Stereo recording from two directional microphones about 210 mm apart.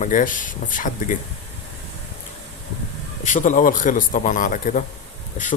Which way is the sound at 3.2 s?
35° left (ahead or behind).